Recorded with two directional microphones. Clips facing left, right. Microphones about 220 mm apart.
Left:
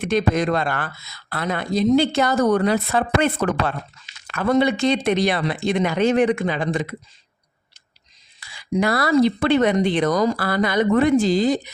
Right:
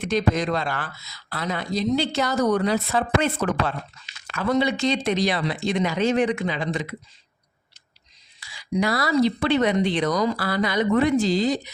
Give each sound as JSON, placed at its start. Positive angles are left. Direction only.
{"t": 0.0, "sound": "speech", "side_deg": 55}
{"t": 8.4, "sound": "speech", "side_deg": 55}